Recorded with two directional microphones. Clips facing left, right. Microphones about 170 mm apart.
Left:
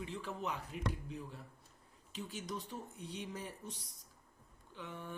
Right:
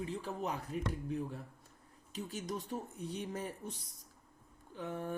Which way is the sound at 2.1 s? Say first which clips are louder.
Right 3 dB; 40° right (ahead or behind).